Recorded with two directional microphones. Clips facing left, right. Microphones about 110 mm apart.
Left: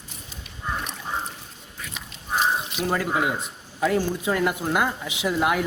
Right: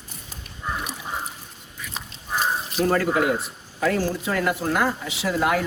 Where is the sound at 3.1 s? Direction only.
20° left (ahead or behind).